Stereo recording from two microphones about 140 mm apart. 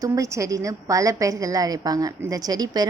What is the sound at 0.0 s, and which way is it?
A woman's voice, 25° right (ahead or behind).